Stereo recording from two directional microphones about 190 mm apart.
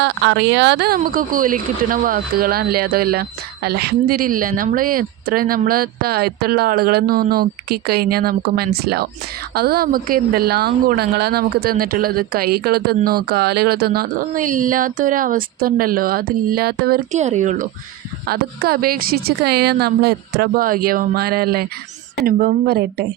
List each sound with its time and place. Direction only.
0.0 s speech: 65° right (ahead or behind)
17.1 s speech: 40° right (ahead or behind)
18.3 s speech: 50° right (ahead or behind)